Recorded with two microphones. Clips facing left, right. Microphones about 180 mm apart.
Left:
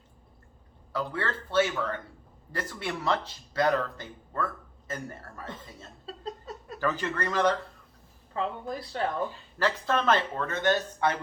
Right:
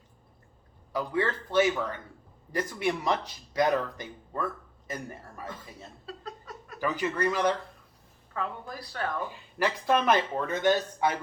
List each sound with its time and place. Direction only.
0.9 s speech: 15° right (ahead or behind)
6.1 s a sound: 25° left (ahead or behind)
6.7 s speech: 10° right (ahead or behind)
8.3 s a woman's voice: 25° left (ahead or behind)
9.3 s speech: 15° right (ahead or behind)